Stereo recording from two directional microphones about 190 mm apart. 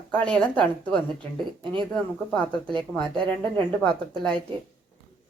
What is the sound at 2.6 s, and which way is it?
Speech, 5° left (ahead or behind).